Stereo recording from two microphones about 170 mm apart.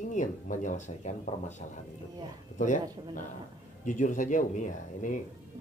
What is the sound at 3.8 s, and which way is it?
Speech, 50° left (ahead or behind).